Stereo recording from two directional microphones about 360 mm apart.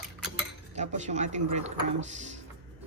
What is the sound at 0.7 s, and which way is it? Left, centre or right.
Speech, centre.